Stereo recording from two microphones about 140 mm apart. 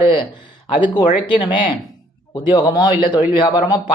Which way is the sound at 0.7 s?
35° left (ahead or behind).